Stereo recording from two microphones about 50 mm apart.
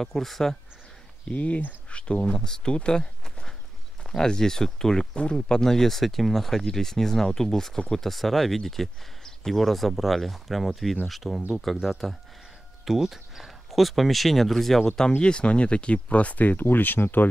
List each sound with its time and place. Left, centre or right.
0.0 s speech: centre
1.3 s speech: left
2.7 s a sound: centre
4.0 s speech: centre
12.8 s speech: centre; by 17.3 s left